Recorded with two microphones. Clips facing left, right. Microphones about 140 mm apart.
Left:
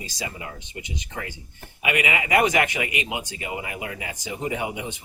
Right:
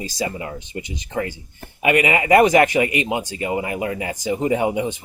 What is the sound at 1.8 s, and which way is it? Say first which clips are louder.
Speech: right 8 dB; 40° right (ahead or behind).